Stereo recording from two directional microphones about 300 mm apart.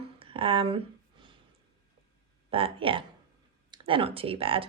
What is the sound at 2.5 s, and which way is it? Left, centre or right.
Speech, centre.